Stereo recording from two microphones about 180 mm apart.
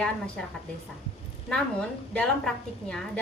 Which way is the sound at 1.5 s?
5° left (ahead or behind).